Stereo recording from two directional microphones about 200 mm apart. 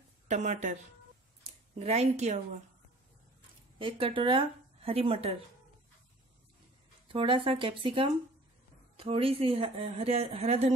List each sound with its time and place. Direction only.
0.3 s speech: 35° right (ahead or behind)
1.8 s speech: 30° right (ahead or behind)
3.7 s speech: 25° right (ahead or behind)
7.1 s speech: 25° right (ahead or behind)